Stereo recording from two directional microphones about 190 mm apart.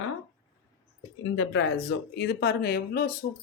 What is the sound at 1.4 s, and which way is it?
Speech, 65° left (ahead or behind).